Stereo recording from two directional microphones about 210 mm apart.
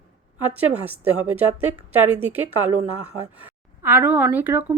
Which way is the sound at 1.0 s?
90° right.